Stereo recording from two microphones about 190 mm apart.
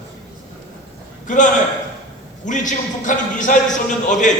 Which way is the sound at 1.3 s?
40° left (ahead or behind).